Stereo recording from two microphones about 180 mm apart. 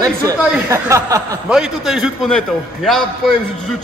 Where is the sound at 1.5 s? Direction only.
5° right (ahead or behind).